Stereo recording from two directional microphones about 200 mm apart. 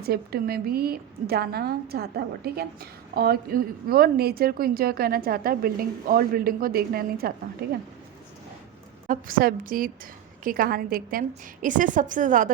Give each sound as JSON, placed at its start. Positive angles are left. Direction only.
{"t": 0.0, "sound": "a woman's voice", "side_deg": -50}
{"t": 9.0, "sound": "a woman's voice", "side_deg": -45}